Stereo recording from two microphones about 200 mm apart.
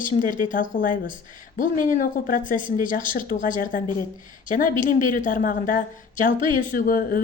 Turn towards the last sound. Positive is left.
turn(degrees=45)  # may be behind; listen again after turning